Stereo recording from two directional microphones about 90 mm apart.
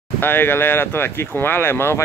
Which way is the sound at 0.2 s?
25° left (ahead or behind).